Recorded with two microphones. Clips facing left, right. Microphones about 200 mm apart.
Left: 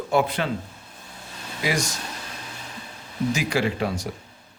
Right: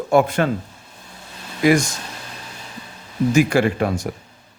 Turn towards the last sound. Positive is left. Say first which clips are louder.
# right 6 dB
turn(degrees=-50)  # may be behind; listen again after turning